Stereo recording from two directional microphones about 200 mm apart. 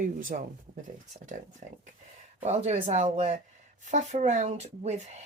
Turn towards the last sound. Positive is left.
turn(degrees=-35)  # may be behind; listen again after turning